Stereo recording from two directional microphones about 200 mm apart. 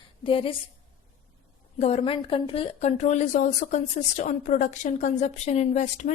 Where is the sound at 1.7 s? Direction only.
30° left (ahead or behind).